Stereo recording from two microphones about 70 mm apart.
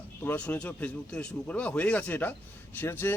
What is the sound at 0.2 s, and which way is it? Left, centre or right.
Speech, left.